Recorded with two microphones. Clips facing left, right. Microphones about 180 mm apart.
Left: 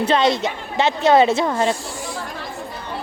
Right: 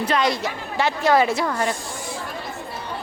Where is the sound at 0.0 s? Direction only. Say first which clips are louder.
Left 4 dB; 25° left (ahead or behind).